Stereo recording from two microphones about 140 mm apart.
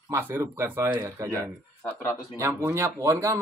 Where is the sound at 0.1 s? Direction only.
20° right (ahead or behind).